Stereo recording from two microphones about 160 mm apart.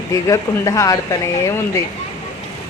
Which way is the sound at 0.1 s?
20° left (ahead or behind).